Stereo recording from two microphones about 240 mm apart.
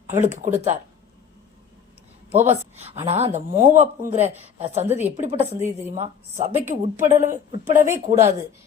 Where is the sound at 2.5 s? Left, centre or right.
Right.